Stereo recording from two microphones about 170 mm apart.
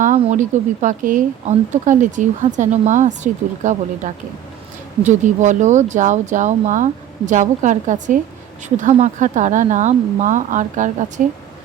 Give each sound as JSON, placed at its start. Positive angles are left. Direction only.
{"t": 0.0, "sound": "speech", "side_deg": -45}